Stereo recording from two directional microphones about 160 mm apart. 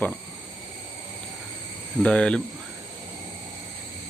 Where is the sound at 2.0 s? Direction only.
5° left (ahead or behind).